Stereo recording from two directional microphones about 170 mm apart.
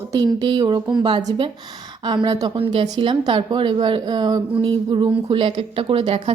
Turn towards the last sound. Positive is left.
turn(degrees=-35)  # may be behind; listen again after turning